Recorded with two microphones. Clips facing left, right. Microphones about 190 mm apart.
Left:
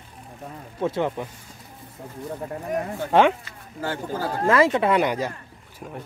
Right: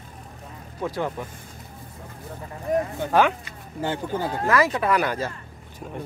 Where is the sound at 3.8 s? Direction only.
20° right (ahead or behind).